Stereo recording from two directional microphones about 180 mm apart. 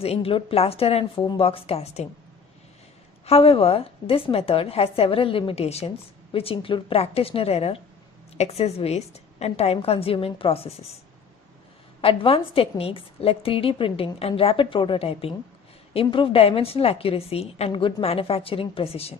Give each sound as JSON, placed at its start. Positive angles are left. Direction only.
{"t": 0.0, "sound": "a woman's voice", "side_deg": 35}
{"t": 3.3, "sound": "a woman's voice", "side_deg": 30}
{"t": 12.0, "sound": "a woman's voice", "side_deg": 30}